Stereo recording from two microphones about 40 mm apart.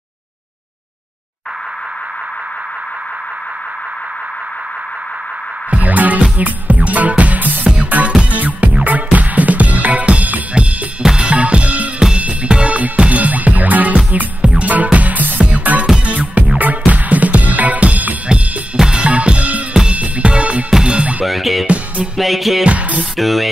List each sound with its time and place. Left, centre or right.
5.7 s music: right
7.6 s music: right
11.1 s drum: right
12.2 s music: right
14.4 s music: right
18.8 s music: right
21.3 s music: centre
21.6 s music: right
22.1 s music: centre
22.7 s music: right
23.1 s music: centre